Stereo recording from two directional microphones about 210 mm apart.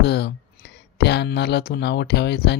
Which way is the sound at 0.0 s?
55° left (ahead or behind).